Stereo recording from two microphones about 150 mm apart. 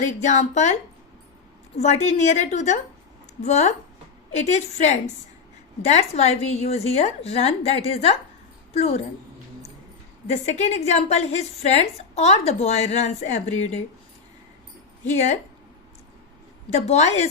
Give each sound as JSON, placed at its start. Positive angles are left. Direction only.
{"t": 0.0, "sound": "a woman's voice", "side_deg": 55}
{"t": 10.2, "sound": "a woman's voice", "side_deg": 50}
{"t": 16.6, "sound": "a woman's voice", "side_deg": 45}